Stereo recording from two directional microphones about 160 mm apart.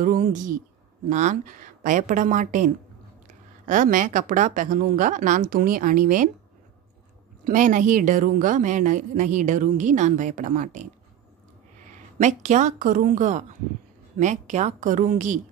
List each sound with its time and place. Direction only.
0.0 s a woman's voice: 55° right (ahead or behind)
7.4 s a woman's voice: 55° right (ahead or behind)
11.9 s a woman's voice: 50° right (ahead or behind)